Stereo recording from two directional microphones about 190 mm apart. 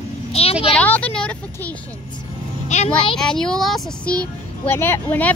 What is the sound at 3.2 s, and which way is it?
Speech, 5° left (ahead or behind).